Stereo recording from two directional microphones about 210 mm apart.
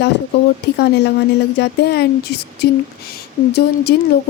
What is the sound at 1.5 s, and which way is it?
Speech, 55° left (ahead or behind).